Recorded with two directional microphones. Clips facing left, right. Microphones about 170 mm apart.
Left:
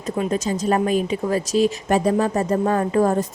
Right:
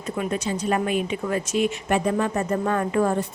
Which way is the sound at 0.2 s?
40° left (ahead or behind).